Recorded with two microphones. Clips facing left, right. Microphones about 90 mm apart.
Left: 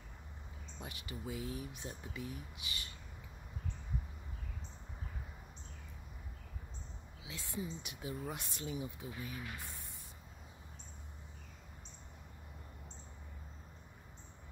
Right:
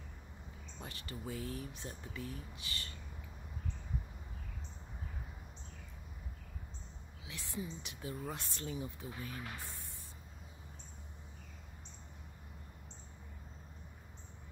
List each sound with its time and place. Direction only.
0.7 s speech: 15° left (ahead or behind)
7.2 s a sound: 20° left (ahead or behind)
7.8 s speech: 20° left (ahead or behind)